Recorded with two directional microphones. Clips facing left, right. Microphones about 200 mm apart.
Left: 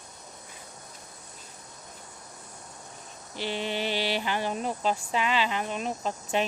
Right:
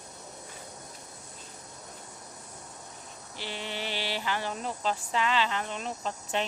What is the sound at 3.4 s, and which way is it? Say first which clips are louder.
Speech: left 6 dB; 20° left (ahead or behind).